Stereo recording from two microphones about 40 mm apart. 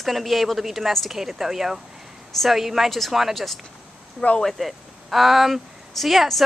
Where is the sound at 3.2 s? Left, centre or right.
Centre.